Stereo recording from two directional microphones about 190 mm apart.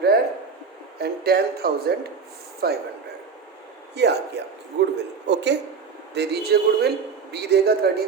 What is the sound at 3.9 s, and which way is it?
Speech, 60° right (ahead or behind).